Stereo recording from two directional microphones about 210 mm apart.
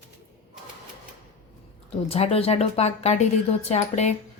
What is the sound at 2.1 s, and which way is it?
Speech, 30° left (ahead or behind).